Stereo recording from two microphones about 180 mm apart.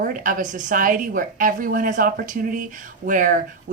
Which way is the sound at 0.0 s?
50° right (ahead or behind).